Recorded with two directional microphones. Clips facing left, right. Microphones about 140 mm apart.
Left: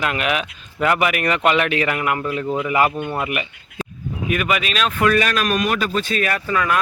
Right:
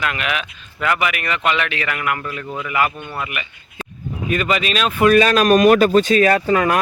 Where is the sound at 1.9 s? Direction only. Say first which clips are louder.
Left 2 dB; 25° left (ahead or behind).